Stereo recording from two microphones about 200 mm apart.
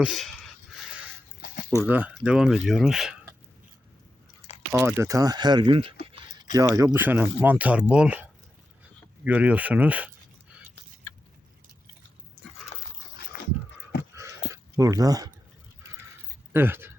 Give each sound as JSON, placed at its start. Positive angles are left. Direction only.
{"t": 0.0, "sound": "a sound", "side_deg": 0}
{"t": 1.9, "sound": "speech", "side_deg": -10}
{"t": 4.7, "sound": "speech", "side_deg": -5}
{"t": 5.0, "sound": "speech", "side_deg": -15}
{"t": 13.3, "sound": "a sound", "side_deg": 40}
{"t": 14.2, "sound": "dog", "side_deg": -15}
{"t": 16.5, "sound": "speech", "side_deg": -10}